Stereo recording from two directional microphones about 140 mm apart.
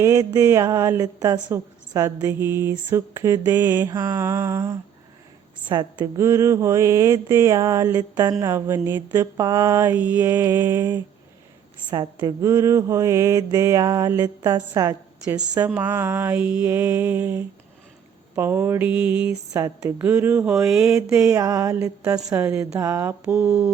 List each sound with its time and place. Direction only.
0.0 s a woman's voice: 20° right (ahead or behind)
3.4 s mantra: 15° right (ahead or behind)
5.6 s a woman's voice: 30° right (ahead or behind)
6.1 s a woman's voice: 20° right (ahead or behind)
9.1 s mantra: 20° right (ahead or behind)
11.9 s a woman's voice: 30° right (ahead or behind)
15.7 s mantra: 15° right (ahead or behind)
19.3 s a woman's voice: 25° right (ahead or behind)
20.0 s mantra: 15° right (ahead or behind)
20.5 s a sound: 5° right (ahead or behind)
21.2 s a woman's voice: 20° right (ahead or behind)
23.3 s mantra: 5° right (ahead or behind)